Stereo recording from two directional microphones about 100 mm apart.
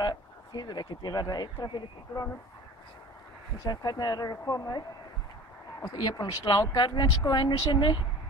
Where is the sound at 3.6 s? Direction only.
40° left (ahead or behind).